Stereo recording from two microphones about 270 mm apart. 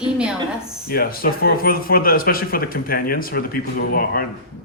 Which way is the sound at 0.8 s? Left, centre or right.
Left.